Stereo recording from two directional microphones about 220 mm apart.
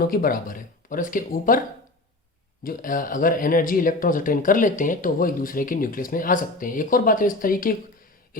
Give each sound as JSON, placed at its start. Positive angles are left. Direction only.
{"t": 0.1, "sound": "speech", "side_deg": 40}
{"t": 2.6, "sound": "speech", "side_deg": 40}